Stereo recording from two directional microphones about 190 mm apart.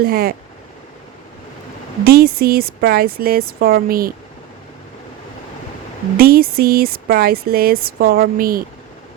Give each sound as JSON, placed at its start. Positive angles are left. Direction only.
{"t": 0.0, "sound": "speech", "side_deg": -50}
{"t": 2.0, "sound": "speech", "side_deg": -55}
{"t": 6.1, "sound": "speech", "side_deg": -50}